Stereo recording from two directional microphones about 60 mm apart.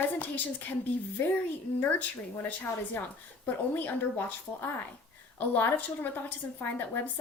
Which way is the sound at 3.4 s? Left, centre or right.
Left.